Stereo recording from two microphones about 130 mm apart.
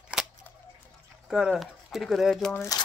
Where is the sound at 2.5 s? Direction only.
25° left (ahead or behind).